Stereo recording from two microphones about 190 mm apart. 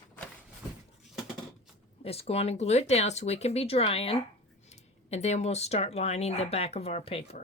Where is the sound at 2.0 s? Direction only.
30° left (ahead or behind).